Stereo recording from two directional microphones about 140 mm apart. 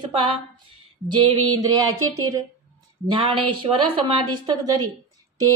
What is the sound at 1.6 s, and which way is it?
Speech, 25° right (ahead or behind).